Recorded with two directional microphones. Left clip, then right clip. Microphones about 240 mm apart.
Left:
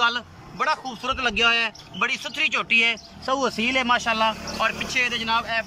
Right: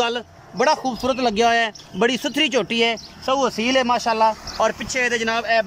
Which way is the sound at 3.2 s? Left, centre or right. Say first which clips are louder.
Right 3 dB; centre.